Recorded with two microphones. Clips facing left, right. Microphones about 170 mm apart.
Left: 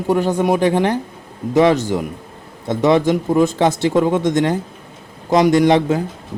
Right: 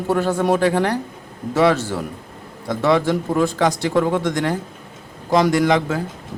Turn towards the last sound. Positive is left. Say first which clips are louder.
# left 4 dB
turn(degrees=25)  # may be behind; listen again after turning